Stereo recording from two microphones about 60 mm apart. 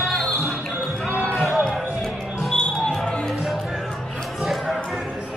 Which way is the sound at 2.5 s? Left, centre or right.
Centre.